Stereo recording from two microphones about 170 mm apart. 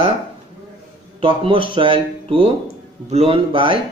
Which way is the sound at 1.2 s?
30° right (ahead or behind).